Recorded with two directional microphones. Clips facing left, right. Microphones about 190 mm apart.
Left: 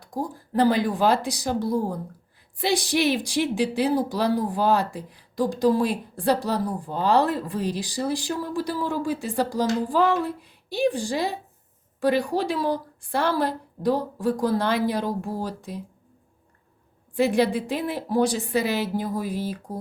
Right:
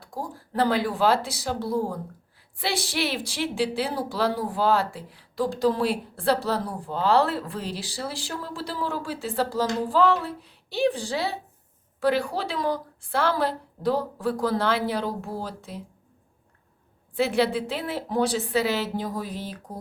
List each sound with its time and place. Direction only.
0.0 s a woman's voice: 15° left (ahead or behind)
17.2 s a woman's voice: 15° left (ahead or behind)